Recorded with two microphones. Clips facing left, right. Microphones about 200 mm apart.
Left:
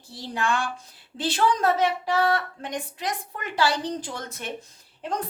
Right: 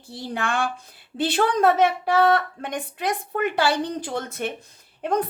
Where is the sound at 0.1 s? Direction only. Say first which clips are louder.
Even; 60° right (ahead or behind).